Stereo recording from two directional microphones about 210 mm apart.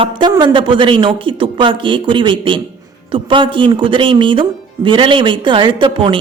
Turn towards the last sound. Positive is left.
turn(degrees=-25)  # may be behind; listen again after turning